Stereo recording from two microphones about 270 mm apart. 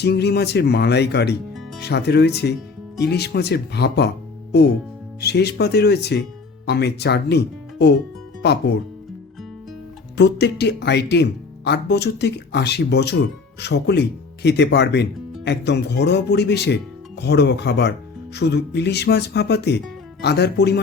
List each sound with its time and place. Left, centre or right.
0.0 s speech: left
10.2 s speech: left